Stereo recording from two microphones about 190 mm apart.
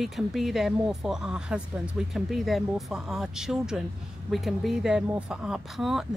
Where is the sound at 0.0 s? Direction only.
Centre (ahead or behind).